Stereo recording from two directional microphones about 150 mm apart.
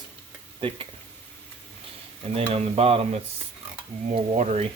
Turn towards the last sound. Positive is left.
turn(degrees=-45)  # may be behind; listen again after turning